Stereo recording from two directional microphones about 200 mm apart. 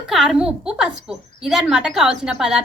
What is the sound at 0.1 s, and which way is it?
A woman's voice, centre (ahead or behind).